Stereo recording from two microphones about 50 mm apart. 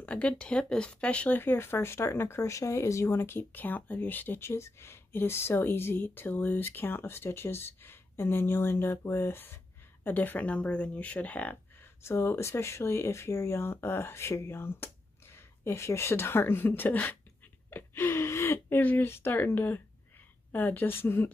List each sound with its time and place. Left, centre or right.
0.0 s speech: left
1.3 s speech: left
3.1 s speech: left
4.4 s speech: left
10.0 s speech: left
11.8 s speech: left
17.6 s gasp: left
18.7 s speech: left
19.0 s speech: left